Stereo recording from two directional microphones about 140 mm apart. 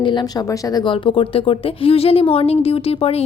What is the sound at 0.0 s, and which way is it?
Speech, 35° left (ahead or behind).